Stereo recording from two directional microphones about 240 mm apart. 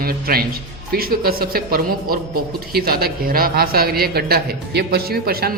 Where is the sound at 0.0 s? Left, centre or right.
Right.